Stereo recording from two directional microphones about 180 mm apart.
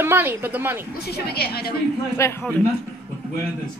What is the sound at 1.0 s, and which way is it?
Speech, 60° left (ahead or behind).